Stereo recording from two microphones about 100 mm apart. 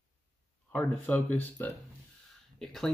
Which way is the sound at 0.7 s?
15° left (ahead or behind).